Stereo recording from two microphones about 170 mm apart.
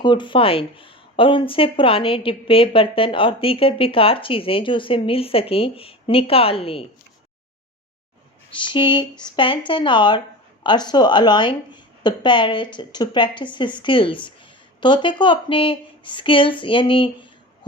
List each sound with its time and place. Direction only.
0.0 s speech: 25° left (ahead or behind)
8.5 s a woman's voice: 30° left (ahead or behind)